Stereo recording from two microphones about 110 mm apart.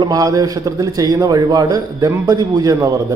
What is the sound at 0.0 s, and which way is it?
A man's voice, 35° right (ahead or behind).